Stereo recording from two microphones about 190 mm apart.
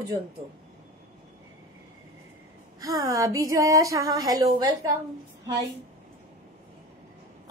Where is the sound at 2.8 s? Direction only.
20° right (ahead or behind).